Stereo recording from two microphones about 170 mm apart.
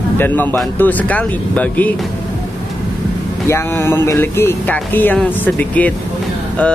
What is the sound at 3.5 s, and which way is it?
Speech, 15° left (ahead or behind).